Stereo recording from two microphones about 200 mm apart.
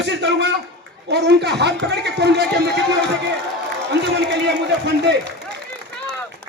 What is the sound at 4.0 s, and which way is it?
Speech, 60° right (ahead or behind).